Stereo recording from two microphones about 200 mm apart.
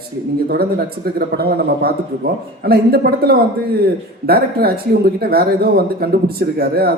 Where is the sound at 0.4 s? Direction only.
50° right (ahead or behind).